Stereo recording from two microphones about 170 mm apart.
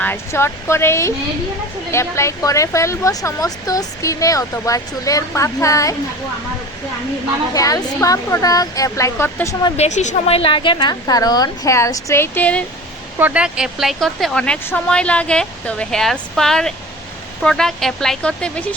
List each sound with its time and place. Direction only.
0.0 s speech: 15° left (ahead or behind)
7.5 s speech: 20° left (ahead or behind)
9.7 s speech: 40° left (ahead or behind); by 12.6 s 10° left (ahead or behind)
13.1 s speech: 10° right (ahead or behind)